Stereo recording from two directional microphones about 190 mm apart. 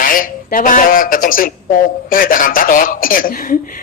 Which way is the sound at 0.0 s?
45° left (ahead or behind).